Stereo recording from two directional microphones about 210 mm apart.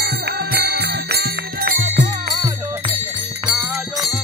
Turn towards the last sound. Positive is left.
turn(degrees=-5)  # may be behind; listen again after turning